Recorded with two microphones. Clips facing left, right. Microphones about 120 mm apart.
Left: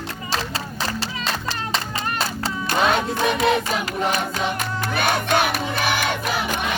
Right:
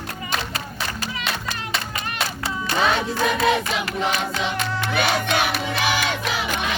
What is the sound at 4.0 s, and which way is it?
Music, 45° left (ahead or behind).